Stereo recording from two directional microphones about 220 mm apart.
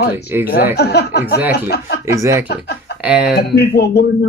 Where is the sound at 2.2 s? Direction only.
15° right (ahead or behind).